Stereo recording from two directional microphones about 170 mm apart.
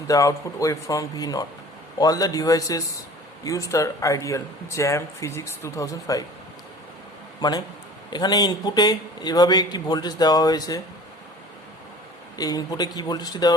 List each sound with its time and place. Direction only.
0.1 s speech: 20° left (ahead or behind)
7.4 s speech: 25° left (ahead or behind)
12.4 s speech: 20° left (ahead or behind)